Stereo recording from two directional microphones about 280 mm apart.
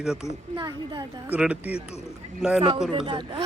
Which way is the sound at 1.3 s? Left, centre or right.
Centre.